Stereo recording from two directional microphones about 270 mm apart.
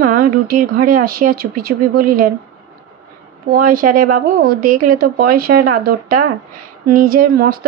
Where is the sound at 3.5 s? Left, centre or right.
Right.